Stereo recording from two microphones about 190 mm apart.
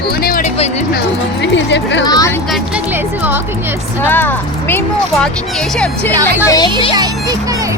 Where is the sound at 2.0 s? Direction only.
20° left (ahead or behind).